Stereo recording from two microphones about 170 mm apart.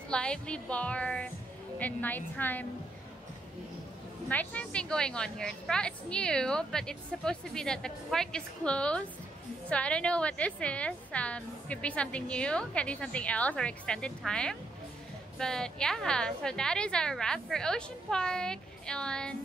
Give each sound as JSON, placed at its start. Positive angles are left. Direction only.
{"t": 0.1, "sound": "a woman's voice", "side_deg": 5}
{"t": 4.3, "sound": "a woman's voice", "side_deg": 10}